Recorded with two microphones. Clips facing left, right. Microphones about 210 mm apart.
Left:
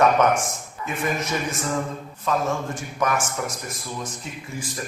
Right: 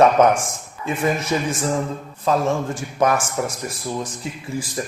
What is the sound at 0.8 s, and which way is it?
Speech, 30° right (ahead or behind).